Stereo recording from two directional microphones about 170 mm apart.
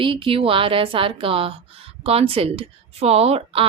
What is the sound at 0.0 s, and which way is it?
Speech, 30° right (ahead or behind).